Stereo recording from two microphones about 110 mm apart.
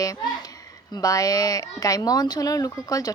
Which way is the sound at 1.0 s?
35° left (ahead or behind).